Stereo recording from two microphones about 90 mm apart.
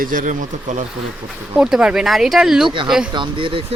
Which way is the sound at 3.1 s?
65° right (ahead or behind).